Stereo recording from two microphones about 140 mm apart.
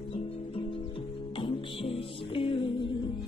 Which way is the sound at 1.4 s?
40° left (ahead or behind).